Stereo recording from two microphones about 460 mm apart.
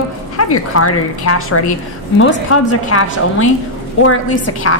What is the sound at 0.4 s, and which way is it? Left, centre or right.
A woman's voice, left.